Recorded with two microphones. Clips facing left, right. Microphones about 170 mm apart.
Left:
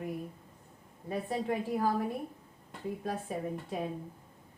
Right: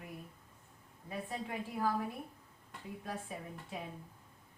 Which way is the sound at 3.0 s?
45° left (ahead or behind).